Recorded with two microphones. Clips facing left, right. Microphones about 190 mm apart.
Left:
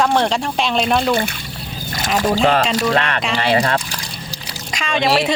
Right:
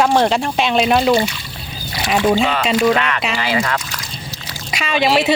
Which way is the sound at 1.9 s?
45° left (ahead or behind).